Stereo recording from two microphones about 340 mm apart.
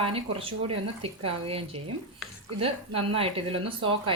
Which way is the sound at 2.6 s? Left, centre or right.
Centre.